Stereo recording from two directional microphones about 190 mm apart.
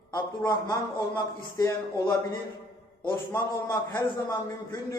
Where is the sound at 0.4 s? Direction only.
20° left (ahead or behind).